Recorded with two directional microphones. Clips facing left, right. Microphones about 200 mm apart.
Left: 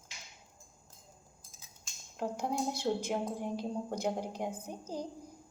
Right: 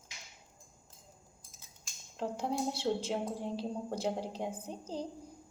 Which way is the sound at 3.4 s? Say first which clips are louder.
Left 1 dB; 15° left (ahead or behind).